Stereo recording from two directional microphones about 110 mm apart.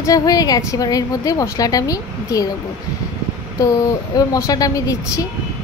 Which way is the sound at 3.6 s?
30° left (ahead or behind).